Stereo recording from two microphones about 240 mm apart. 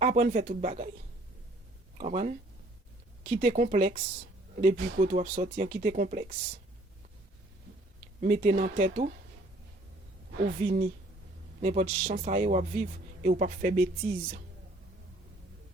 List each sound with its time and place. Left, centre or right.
0.0 s speech: right
2.0 s speech: right
8.2 s speech: right
10.4 s speech: right